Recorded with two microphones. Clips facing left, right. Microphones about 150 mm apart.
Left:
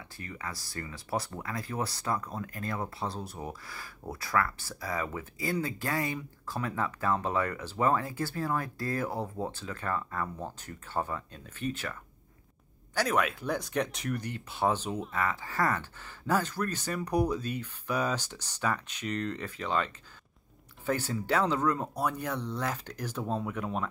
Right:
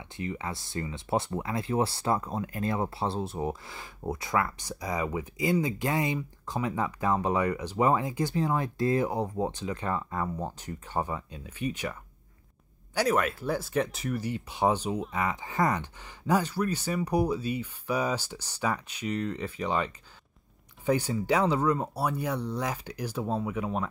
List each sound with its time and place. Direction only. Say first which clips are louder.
0.2 s speech: right 7 dB; 20° right (ahead or behind); by 23.9 s 5° right (ahead or behind)